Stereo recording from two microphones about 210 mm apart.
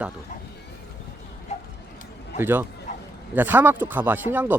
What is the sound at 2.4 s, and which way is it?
Speech, 10° right (ahead or behind).